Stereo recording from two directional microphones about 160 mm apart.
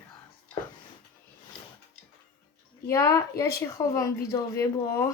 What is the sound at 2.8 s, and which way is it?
A woman's voice, 20° left (ahead or behind).